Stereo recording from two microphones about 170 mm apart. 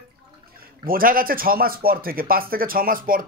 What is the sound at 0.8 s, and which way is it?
A man's voice, 55° right (ahead or behind).